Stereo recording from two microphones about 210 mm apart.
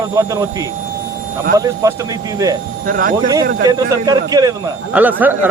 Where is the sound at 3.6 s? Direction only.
20° right (ahead or behind).